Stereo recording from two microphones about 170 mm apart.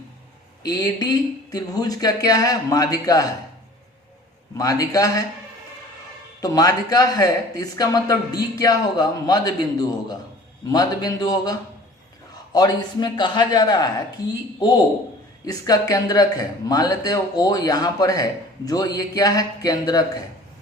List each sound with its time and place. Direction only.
0.6 s speech: 20° left (ahead or behind)
4.5 s speech: 20° left (ahead or behind)
6.4 s speech: 20° left (ahead or behind)
15.4 s speech: 20° left (ahead or behind)